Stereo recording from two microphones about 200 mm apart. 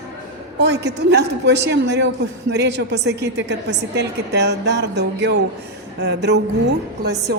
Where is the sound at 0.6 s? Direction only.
60° right (ahead or behind).